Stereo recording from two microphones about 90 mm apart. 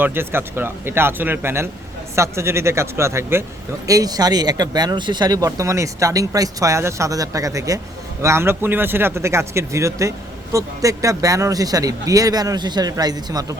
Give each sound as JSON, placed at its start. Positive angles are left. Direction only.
{"t": 0.0, "sound": "speech", "side_deg": -25}
{"t": 3.8, "sound": "speech", "side_deg": -40}
{"t": 5.5, "sound": "speech", "side_deg": -35}